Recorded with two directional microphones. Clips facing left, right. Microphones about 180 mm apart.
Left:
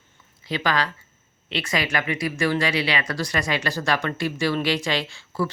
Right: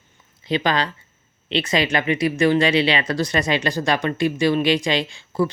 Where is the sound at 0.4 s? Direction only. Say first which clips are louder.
Right 3 dB; 20° right (ahead or behind).